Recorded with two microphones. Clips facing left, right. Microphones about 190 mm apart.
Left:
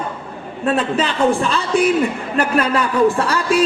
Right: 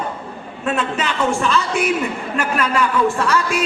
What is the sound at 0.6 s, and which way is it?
A man's voice, 35° left (ahead or behind).